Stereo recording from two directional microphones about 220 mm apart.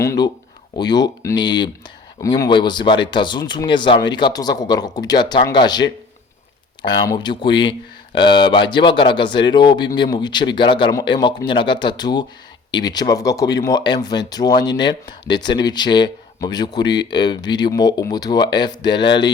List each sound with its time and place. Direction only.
0.0 s speech: 15° left (ahead or behind)